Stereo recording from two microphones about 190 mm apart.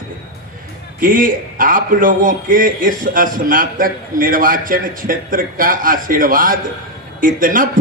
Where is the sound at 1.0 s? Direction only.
45° right (ahead or behind).